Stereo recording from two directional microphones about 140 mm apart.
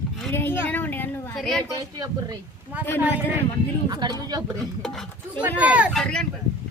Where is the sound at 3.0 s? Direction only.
10° right (ahead or behind).